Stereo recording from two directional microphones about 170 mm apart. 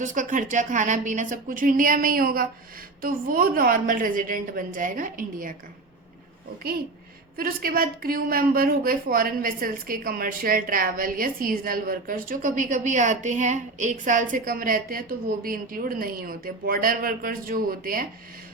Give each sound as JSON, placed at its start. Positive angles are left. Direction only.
{"t": 0.0, "sound": "a woman's voice", "side_deg": -45}
{"t": 7.3, "sound": "a woman's voice", "side_deg": -60}